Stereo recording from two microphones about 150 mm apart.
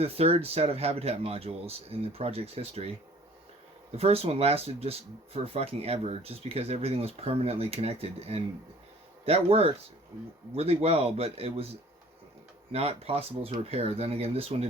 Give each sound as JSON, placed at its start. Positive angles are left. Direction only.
{"t": 0.0, "sound": "speech", "side_deg": -40}
{"t": 3.9, "sound": "speech", "side_deg": -40}
{"t": 12.7, "sound": "speech", "side_deg": -40}